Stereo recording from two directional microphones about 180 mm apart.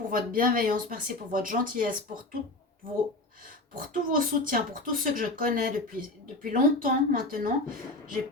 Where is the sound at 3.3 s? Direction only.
50° right (ahead or behind).